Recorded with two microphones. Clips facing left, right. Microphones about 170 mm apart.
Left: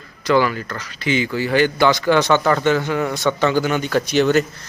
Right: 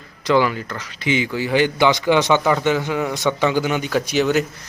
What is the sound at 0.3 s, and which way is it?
Speech, 20° right (ahead or behind).